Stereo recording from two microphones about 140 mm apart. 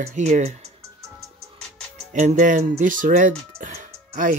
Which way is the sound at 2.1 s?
60° right (ahead or behind).